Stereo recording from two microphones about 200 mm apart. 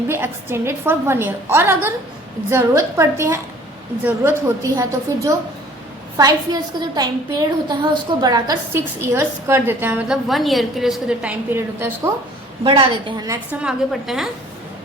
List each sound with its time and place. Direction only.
0.1 s a woman's voice: 10° right (ahead or behind)
12.6 s a woman's voice: 25° right (ahead or behind)
13.6 s a woman's voice: 5° right (ahead or behind)